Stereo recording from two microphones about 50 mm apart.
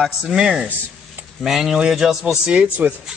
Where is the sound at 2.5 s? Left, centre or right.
Right.